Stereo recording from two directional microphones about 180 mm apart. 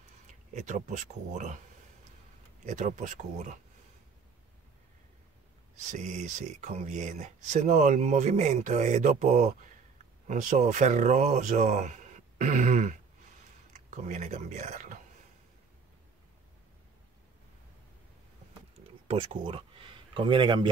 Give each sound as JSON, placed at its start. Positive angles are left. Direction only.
{"t": 0.3, "sound": "speech", "side_deg": -40}
{"t": 2.6, "sound": "speech", "side_deg": -40}
{"t": 5.9, "sound": "speech", "side_deg": -40}
{"t": 19.0, "sound": "speech", "side_deg": -30}